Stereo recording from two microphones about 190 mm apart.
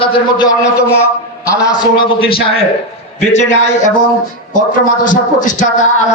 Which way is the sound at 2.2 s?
30° left (ahead or behind).